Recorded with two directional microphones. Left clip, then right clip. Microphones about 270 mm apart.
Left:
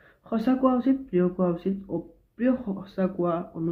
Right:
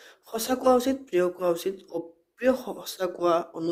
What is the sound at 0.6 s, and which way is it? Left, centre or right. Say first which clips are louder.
Speech: right 6 dB; right.